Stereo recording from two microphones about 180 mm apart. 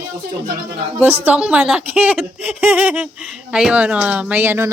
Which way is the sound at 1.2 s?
5° right (ahead or behind).